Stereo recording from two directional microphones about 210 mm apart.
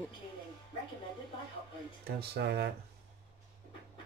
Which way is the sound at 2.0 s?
50° right (ahead or behind).